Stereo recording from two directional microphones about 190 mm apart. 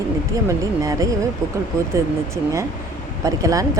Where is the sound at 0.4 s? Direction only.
15° right (ahead or behind).